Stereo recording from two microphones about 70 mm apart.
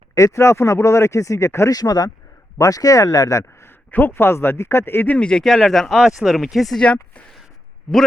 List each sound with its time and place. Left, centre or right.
0.1 s speech: left
1.7 s speech: left
2.6 s speech: left
3.9 s speech: left
5.1 s speech: centre
6.7 s speech: centre